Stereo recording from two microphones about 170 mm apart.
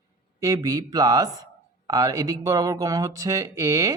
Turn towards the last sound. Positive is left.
turn(degrees=-20)  # may be behind; listen again after turning